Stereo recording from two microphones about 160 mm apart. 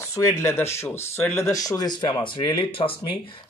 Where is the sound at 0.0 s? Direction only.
20° left (ahead or behind).